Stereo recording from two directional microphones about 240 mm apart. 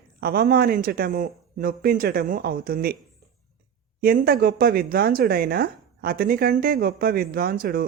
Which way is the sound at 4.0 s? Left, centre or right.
Right.